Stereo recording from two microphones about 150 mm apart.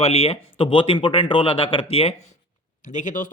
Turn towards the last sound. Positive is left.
turn(degrees=60)  # may be behind; listen again after turning